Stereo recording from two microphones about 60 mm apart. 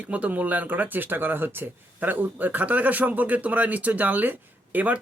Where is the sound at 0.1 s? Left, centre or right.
Right.